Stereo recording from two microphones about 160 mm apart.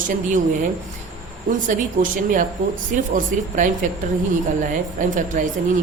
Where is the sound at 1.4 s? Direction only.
55° right (ahead or behind).